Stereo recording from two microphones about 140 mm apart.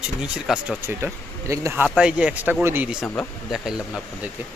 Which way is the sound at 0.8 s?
15° right (ahead or behind).